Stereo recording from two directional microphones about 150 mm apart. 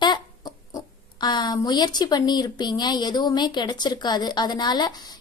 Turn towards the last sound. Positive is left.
turn(degrees=30)  # may be behind; listen again after turning